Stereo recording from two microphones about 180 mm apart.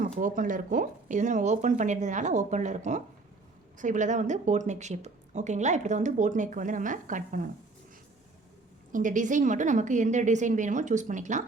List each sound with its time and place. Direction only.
0.2 s speech: 45° right (ahead or behind)
8.9 s speech: 45° right (ahead or behind)